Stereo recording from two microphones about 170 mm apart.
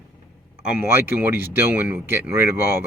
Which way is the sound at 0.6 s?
10° right (ahead or behind).